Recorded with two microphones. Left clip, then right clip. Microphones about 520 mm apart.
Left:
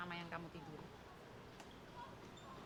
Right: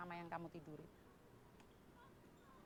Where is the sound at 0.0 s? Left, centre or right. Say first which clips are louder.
Left 2 dB; right.